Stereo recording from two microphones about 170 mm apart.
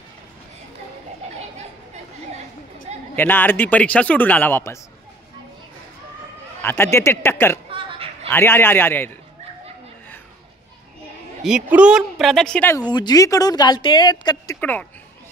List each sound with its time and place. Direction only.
3.2 s speech: 10° left (ahead or behind)
6.6 s speech: 15° left (ahead or behind)
7.7 s a sound: 35° right (ahead or behind)
8.3 s speech: 15° left (ahead or behind)
11.4 s speech: 5° right (ahead or behind)
12.9 s speech: 25° left (ahead or behind)
14.6 s speech: 10° left (ahead or behind)